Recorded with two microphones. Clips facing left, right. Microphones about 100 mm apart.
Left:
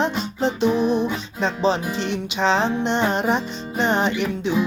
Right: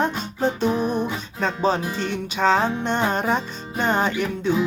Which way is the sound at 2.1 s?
50° right (ahead or behind).